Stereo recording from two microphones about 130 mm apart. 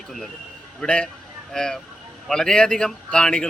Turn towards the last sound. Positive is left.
turn(degrees=5)  # may be behind; listen again after turning